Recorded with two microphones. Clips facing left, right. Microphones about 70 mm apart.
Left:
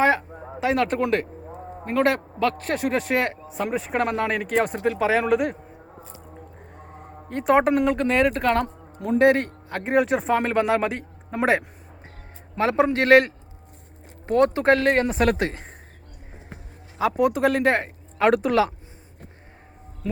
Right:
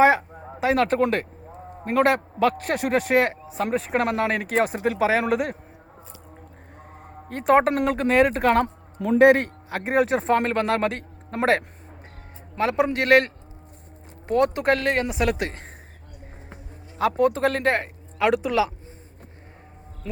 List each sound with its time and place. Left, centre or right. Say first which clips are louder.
0.0 s speech: right 3 dB; centre
0.3 s a sound: left 2 dB; centre
0.6 s speech: right 2 dB; centre
1.5 s a sound: right 1 dB; centre
2.4 s speech: even; centre
6.3 s a sound: left 3 dB; centre
9.2 s speech: right 3 dB; right; by 10.4 s centre
10.4 s a man's voice: left 1 dB; centre
12.5 s speech: left 2 dB; left
17.0 s speech: even; centre
18.2 s speech: left 2 dB; left